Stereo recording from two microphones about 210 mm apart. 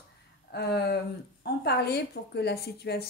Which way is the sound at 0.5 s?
50° left (ahead or behind).